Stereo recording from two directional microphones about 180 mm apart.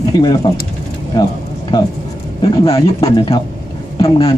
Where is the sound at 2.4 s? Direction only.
25° left (ahead or behind).